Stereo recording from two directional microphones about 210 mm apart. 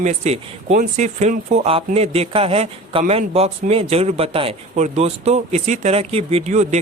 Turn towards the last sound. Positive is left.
turn(degrees=-35)  # may be behind; listen again after turning